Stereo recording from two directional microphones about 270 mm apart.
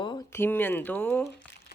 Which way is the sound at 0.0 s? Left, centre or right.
Centre.